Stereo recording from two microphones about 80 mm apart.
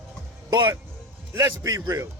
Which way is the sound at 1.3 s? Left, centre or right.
Right.